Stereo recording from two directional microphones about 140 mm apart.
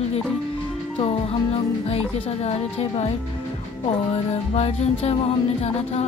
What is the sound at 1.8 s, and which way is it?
Music, 50° left (ahead or behind).